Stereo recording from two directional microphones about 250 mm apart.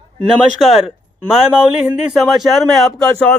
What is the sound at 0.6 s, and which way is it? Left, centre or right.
Speech, centre.